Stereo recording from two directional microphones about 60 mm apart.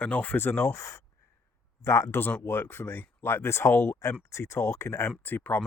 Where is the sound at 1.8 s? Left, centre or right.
Left.